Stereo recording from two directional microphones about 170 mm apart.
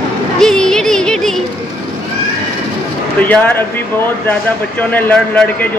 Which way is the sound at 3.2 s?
10° left (ahead or behind).